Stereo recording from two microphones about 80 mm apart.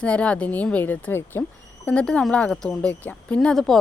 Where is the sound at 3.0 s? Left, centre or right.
Left.